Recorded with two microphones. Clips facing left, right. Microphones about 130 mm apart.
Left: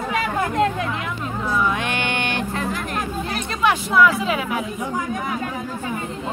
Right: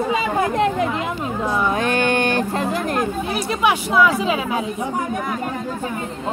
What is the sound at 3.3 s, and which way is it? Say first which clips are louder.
Speech: even; 10° right (ahead or behind).